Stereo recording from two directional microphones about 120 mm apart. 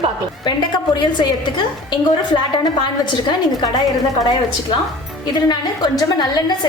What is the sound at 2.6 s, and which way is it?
Speech, 40° left (ahead or behind).